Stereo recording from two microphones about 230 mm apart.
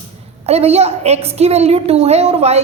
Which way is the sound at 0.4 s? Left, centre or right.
Right.